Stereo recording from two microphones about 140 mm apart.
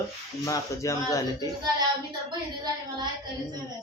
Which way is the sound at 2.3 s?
30° right (ahead or behind).